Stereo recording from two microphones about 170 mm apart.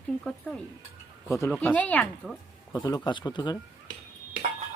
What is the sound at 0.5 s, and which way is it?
Speech, 5° left (ahead or behind).